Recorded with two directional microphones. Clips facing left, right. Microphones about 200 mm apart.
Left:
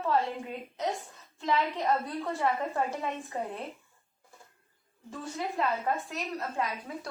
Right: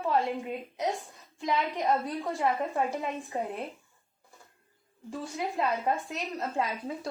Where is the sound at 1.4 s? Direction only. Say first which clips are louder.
Even; 10° right (ahead or behind).